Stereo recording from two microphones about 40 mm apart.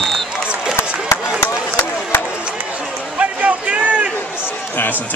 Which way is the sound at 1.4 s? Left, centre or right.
Left.